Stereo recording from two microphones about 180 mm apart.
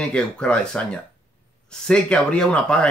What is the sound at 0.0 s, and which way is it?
Speech, 5° left (ahead or behind).